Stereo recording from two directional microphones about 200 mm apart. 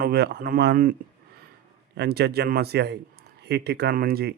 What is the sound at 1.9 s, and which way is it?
A man's voice, 55° right (ahead or behind).